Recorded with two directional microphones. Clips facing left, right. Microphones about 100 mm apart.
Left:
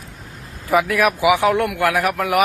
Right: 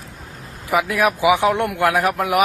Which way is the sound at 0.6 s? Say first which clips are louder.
Left 1 dB; 20° right (ahead or behind).